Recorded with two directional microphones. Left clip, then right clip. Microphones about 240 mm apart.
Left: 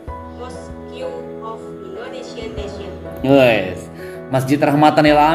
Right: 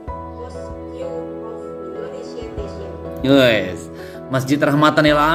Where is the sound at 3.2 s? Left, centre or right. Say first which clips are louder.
Left 1 dB; right.